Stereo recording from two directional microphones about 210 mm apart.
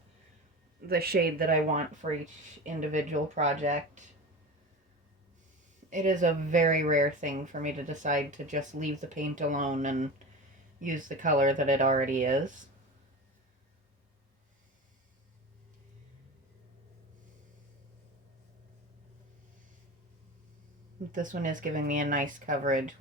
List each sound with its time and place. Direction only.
0.9 s speech: 45° right (ahead or behind)
5.9 s speech: 35° right (ahead or behind)
21.1 s speech: 40° right (ahead or behind)